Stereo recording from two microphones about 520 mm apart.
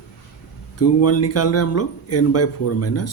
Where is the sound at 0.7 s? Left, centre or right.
Left.